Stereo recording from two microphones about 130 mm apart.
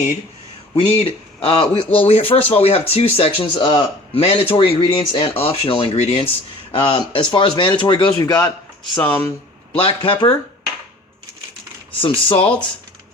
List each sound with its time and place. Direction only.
0.7 s speech: 45° left (ahead or behind)
8.3 s speech: 20° left (ahead or behind)
9.7 s speech: 40° left (ahead or behind)
11.9 s speech: 40° left (ahead or behind)